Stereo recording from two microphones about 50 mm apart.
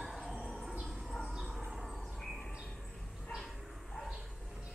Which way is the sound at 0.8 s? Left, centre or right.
Centre.